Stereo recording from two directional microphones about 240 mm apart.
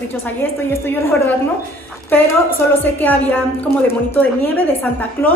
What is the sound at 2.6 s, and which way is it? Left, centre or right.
A woman's voice, centre.